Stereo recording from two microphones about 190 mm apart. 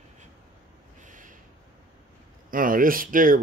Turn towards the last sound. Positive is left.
turn(degrees=-45)  # may be behind; listen again after turning